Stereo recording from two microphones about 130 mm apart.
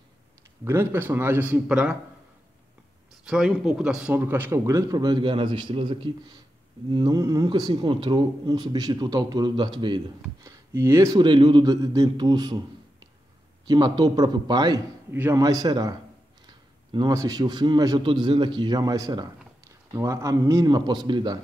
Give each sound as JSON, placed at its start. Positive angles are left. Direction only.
{"t": 0.7, "sound": "a man's voice", "side_deg": -15}
{"t": 3.3, "sound": "a man's voice", "side_deg": -5}
{"t": 10.4, "sound": "speech", "side_deg": -20}
{"t": 11.1, "sound": "a man's voice", "side_deg": -35}
{"t": 15.0, "sound": "a man's voice", "side_deg": -15}
{"t": 15.4, "sound": "speech", "side_deg": -30}
{"t": 16.4, "sound": "a sound", "side_deg": -35}
{"t": 17.1, "sound": "a man's voice", "side_deg": -25}